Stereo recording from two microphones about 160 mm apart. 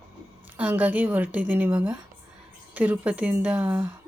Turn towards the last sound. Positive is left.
turn(degrees=-10)  # may be behind; listen again after turning